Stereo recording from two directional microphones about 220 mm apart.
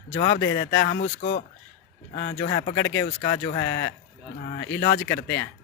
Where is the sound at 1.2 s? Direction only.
45° left (ahead or behind).